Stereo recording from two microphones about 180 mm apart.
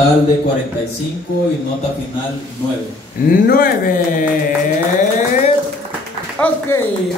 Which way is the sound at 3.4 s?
55° left (ahead or behind).